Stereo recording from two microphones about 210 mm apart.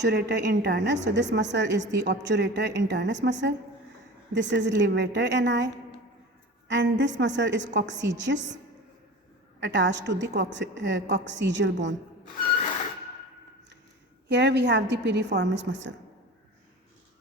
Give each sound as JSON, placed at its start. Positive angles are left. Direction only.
{"t": 0.0, "sound": "a woman's voice", "side_deg": -55}
{"t": 4.4, "sound": "a woman's voice", "side_deg": -55}
{"t": 9.6, "sound": "a woman's voice", "side_deg": -60}
{"t": 14.3, "sound": "a woman's voice", "side_deg": -55}